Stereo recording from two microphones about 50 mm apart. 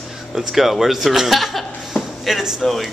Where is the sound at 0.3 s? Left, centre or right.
Centre.